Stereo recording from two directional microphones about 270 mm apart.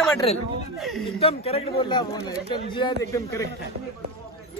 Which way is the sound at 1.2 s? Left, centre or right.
Left.